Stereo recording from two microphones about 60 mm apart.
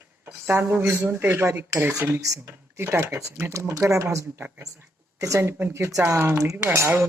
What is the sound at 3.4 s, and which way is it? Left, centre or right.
Speech, right.